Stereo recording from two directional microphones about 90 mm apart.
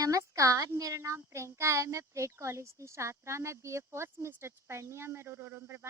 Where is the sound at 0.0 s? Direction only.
40° right (ahead or behind).